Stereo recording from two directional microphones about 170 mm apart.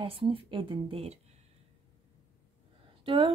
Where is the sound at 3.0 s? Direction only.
30° right (ahead or behind).